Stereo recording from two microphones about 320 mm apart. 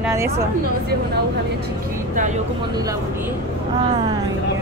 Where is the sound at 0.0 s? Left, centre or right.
Centre.